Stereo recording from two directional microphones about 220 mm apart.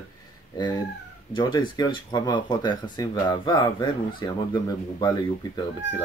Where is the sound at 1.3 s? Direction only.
20° left (ahead or behind).